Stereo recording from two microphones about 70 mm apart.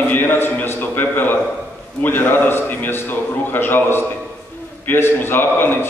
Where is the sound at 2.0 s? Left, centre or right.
Left.